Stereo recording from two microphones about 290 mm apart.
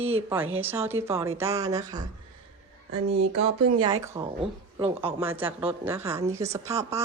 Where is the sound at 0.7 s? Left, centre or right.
Centre.